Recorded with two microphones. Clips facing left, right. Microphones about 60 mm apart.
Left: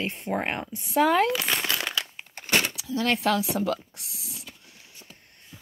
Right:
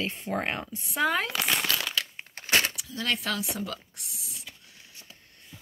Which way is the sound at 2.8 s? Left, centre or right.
Left.